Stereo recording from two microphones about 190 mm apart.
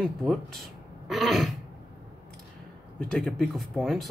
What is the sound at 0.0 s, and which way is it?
Speech, centre (ahead or behind).